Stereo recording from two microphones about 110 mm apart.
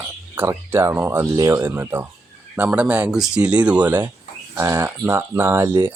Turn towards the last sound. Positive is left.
turn(degrees=-20)  # may be behind; listen again after turning